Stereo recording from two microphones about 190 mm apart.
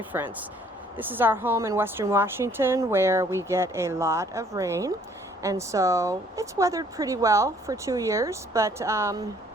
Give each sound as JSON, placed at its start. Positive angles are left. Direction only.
{"t": 0.1, "sound": "a woman's voice", "side_deg": -10}